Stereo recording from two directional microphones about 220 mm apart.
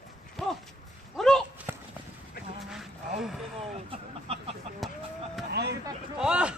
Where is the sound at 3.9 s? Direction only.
25° right (ahead or behind).